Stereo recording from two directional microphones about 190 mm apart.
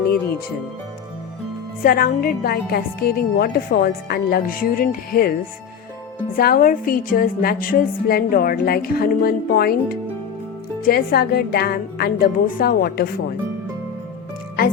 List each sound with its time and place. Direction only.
1.8 s a woman's voice: 50° left (ahead or behind)
6.3 s a woman's voice: 50° left (ahead or behind)